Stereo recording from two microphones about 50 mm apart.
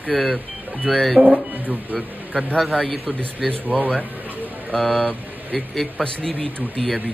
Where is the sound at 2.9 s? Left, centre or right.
Centre.